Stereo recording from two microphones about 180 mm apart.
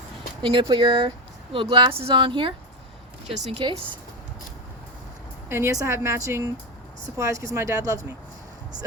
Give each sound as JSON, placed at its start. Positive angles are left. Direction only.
{"t": 0.4, "sound": "speech", "side_deg": -30}
{"t": 3.3, "sound": "speech", "side_deg": -40}
{"t": 3.6, "sound": "speech", "side_deg": -25}
{"t": 5.5, "sound": "a woman's voice", "side_deg": -15}